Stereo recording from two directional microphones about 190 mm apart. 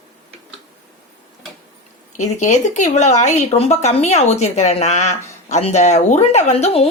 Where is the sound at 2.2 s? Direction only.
40° left (ahead or behind).